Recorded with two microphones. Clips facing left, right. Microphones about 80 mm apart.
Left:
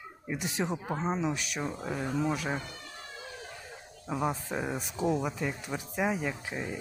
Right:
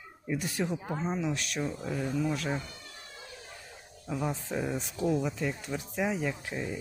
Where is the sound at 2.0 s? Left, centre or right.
Left.